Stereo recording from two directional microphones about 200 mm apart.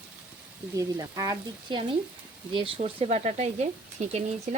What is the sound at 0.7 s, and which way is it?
Speech, 20° right (ahead or behind).